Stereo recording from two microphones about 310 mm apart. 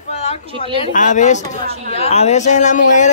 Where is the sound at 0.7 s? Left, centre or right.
Left.